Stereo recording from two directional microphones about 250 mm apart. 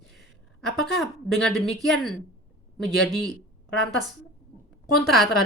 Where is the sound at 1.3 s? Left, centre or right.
Centre.